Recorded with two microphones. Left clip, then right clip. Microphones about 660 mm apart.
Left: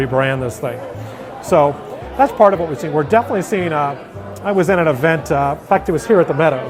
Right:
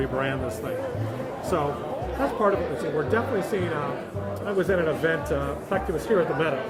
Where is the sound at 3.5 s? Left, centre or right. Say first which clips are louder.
Left 10 dB; left.